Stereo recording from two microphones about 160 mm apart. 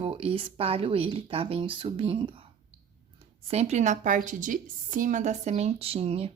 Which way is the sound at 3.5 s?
45° right (ahead or behind).